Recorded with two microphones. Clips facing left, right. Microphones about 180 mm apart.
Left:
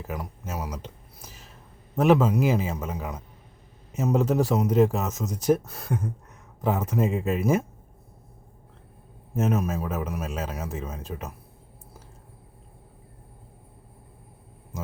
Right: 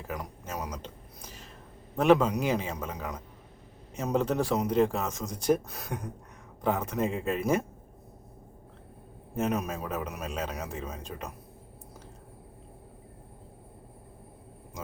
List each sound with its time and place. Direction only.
0.0 s a man's voice: 5° left (ahead or behind)
9.3 s a man's voice: 5° left (ahead or behind)